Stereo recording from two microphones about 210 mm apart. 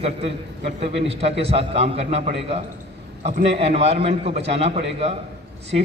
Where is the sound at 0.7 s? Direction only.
30° right (ahead or behind).